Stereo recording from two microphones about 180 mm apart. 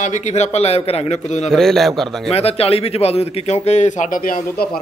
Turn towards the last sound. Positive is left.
turn(degrees=50)  # may be behind; listen again after turning